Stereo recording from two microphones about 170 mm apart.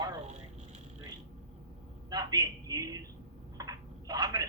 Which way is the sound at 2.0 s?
25° right (ahead or behind).